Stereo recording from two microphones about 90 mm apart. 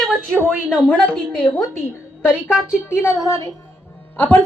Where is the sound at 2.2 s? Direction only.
10° right (ahead or behind).